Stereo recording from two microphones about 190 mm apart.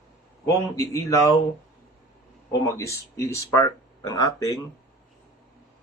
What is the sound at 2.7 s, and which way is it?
Speech, 15° left (ahead or behind).